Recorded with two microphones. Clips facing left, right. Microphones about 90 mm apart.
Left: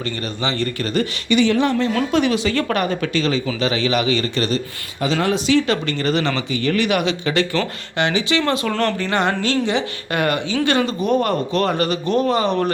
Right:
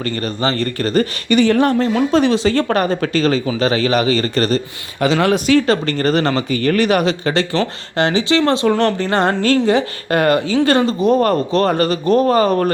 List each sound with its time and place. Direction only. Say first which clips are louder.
0.0 s speech: right 5 dB; 45° right (ahead or behind)
2.1 s a woman's voice: right 4 dB; 35° right (ahead or behind)
4.9 s speech: right 5 dB; 70° right (ahead or behind)
5.6 s a woman's voice: right 4 dB; 40° right (ahead or behind)
8.7 s speech: right 5 dB; 20° right (ahead or behind)
9.0 s a woman's voice: right 4 dB; 35° right (ahead or behind)